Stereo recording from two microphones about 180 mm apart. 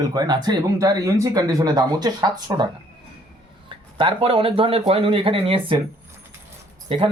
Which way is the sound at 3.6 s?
30° right (ahead or behind).